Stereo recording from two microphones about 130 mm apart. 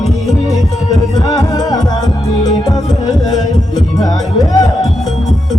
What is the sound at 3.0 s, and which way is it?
Music, 30° left (ahead or behind).